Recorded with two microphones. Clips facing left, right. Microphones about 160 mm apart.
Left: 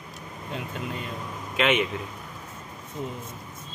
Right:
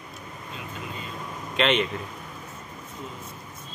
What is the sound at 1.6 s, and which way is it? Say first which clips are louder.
Speech: even; 10° left (ahead or behind).